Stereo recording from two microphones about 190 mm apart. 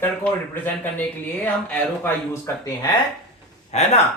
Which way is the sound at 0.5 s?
10° left (ahead or behind).